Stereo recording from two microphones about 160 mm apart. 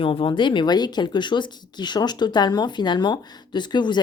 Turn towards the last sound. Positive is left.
turn(degrees=30)  # may be behind; listen again after turning